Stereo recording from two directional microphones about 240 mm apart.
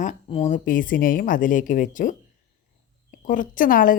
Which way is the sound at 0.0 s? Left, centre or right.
Left.